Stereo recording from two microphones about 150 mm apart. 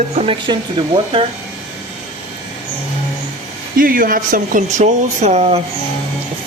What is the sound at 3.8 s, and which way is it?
Speech, 70° right (ahead or behind).